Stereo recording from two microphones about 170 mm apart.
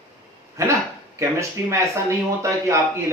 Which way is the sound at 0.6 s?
15° right (ahead or behind).